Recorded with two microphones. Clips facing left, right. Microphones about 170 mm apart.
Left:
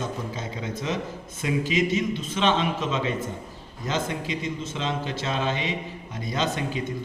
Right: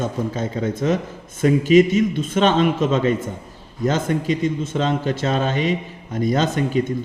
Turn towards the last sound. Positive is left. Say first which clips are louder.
# right 8 dB
turn(degrees=-50)  # may be behind; listen again after turning